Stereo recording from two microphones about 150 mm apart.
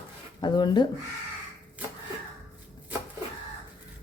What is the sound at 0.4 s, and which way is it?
Speech, 30° left (ahead or behind).